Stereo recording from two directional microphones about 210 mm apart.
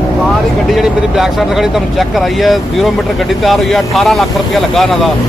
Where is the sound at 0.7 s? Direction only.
Centre (ahead or behind).